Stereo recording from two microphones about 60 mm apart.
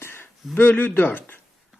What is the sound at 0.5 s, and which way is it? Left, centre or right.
Speech, left.